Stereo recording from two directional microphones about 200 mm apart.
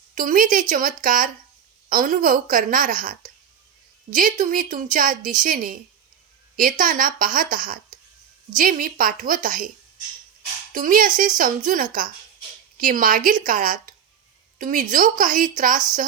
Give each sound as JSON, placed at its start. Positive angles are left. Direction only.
{"t": 0.1, "sound": "a woman's voice", "side_deg": -40}
{"t": 10.7, "sound": "a woman's voice", "side_deg": -45}